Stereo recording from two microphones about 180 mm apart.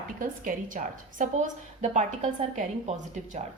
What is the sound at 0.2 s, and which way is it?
A woman's voice, 50° right (ahead or behind).